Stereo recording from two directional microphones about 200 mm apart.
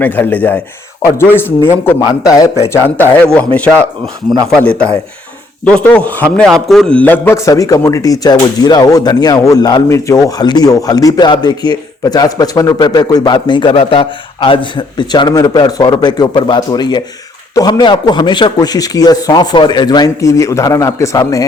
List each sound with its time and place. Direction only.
0.0 s a man's voice: 10° left (ahead or behind)